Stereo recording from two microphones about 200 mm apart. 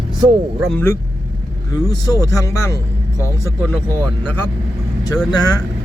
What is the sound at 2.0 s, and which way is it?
Speech, 15° left (ahead or behind).